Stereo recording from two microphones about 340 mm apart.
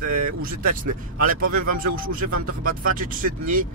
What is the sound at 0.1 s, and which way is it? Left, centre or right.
Speech, right.